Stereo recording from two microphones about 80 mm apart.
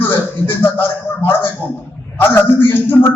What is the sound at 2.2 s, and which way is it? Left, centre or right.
Speech, left.